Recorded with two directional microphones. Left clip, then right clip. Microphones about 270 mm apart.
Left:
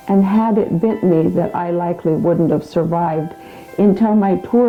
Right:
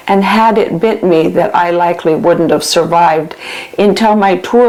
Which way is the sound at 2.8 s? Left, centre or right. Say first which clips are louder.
Right 10 dB; right.